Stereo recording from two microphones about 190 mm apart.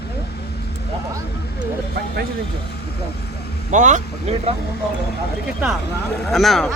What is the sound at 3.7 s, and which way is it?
Speech, 40° right (ahead or behind).